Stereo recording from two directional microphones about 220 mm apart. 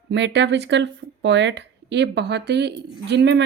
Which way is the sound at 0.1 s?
50° right (ahead or behind).